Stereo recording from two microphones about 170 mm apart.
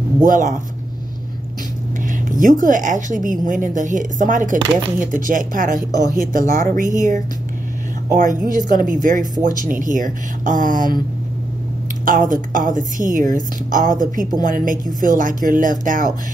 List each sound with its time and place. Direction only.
0.2 s a woman's voice: 50° right (ahead or behind)
2.0 s a woman's voice: 50° right (ahead or behind)
12.0 s a woman's voice: 50° right (ahead or behind)